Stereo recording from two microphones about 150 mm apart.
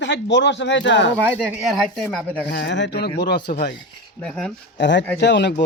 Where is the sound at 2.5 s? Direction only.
90° left.